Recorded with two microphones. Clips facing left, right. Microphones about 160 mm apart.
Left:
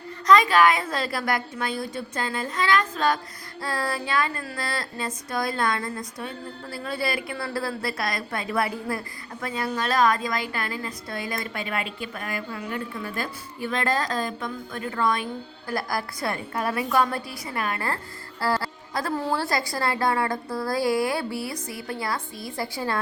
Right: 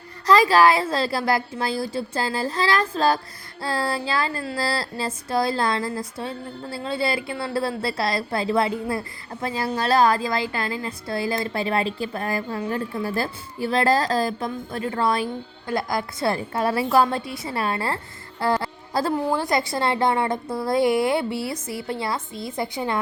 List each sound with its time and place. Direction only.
0.3 s a woman's voice: 30° right (ahead or behind)